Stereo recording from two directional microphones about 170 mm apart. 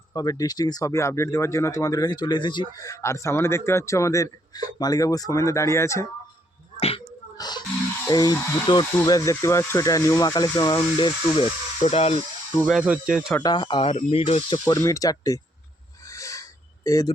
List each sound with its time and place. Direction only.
0.1 s speech: 20° left (ahead or behind)
6.7 s a sound: 35° left (ahead or behind)
7.3 s gasp: 25° left (ahead or behind)
8.0 s speech: 25° left (ahead or behind)
11.8 s speech: 35° left (ahead or behind)
12.6 s speech: 5° right (ahead or behind)
13.4 s speech: 25° left (ahead or behind)
14.6 s speech: 20° left (ahead or behind)
16.0 s a sound: 20° left (ahead or behind)